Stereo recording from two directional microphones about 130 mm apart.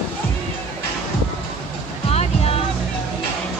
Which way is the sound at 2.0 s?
50° left (ahead or behind).